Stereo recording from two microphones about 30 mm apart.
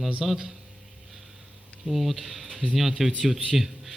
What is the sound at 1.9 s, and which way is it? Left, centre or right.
Speech, centre.